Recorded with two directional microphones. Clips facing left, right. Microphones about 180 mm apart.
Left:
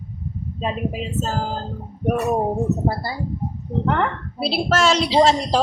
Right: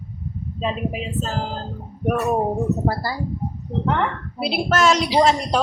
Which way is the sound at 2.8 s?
25° left (ahead or behind).